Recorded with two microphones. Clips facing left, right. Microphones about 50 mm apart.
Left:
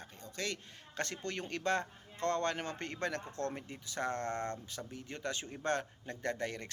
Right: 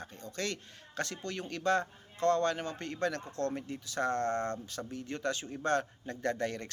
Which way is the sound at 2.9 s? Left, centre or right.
Left.